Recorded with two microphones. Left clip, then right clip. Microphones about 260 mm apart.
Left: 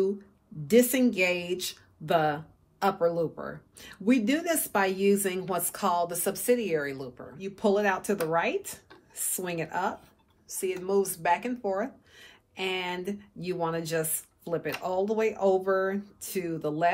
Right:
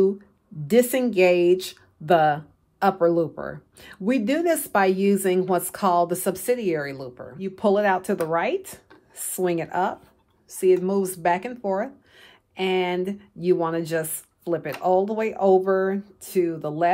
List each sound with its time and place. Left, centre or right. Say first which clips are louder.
0.7 s speech: right 3 dB; right